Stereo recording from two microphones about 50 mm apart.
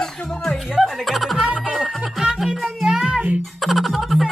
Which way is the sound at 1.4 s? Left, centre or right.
Right.